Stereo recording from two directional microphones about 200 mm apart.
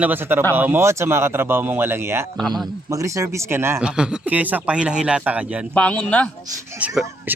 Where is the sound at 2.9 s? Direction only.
15° right (ahead or behind).